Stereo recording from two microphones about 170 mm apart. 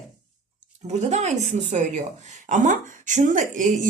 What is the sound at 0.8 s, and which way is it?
A woman's voice, 40° right (ahead or behind).